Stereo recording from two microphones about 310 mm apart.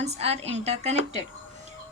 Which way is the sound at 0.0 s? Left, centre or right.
Centre.